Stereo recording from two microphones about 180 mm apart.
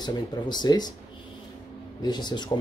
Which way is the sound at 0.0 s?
25° left (ahead or behind).